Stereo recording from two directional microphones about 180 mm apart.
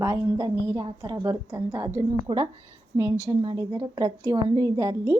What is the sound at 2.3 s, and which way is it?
Speech, 30° right (ahead or behind).